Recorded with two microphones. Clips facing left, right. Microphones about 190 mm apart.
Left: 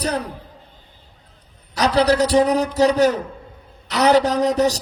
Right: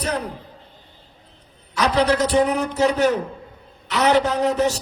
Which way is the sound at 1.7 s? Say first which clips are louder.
Left 2 dB; 35° left (ahead or behind).